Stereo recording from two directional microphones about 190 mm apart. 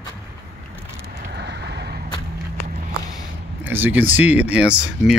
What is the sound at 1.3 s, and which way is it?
Vehicle, 60° right (ahead or behind).